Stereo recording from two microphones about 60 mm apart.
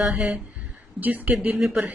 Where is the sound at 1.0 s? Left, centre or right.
Right.